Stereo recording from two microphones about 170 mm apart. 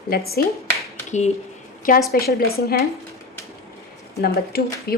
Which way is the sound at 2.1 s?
65° left (ahead or behind).